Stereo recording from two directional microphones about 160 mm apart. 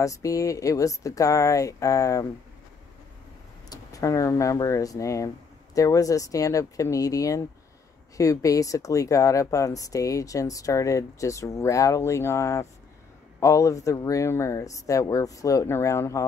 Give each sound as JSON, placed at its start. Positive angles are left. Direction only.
{"t": 0.0, "sound": "speech", "side_deg": 20}
{"t": 3.6, "sound": "speech", "side_deg": 20}